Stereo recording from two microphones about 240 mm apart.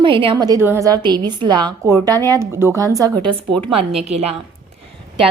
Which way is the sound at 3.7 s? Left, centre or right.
Right.